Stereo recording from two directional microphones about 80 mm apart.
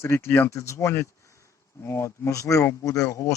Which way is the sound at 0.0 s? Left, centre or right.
Left.